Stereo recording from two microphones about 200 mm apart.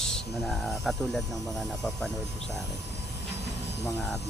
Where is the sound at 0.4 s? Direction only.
Centre (ahead or behind).